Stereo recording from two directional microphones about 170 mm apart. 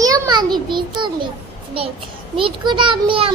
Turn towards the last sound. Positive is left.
turn(degrees=-30)  # may be behind; listen again after turning